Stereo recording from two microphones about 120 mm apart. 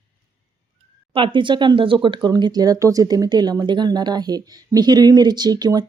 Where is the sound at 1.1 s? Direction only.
45° right (ahead or behind).